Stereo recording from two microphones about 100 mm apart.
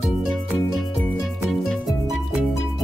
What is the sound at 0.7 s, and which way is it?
Music, centre (ahead or behind).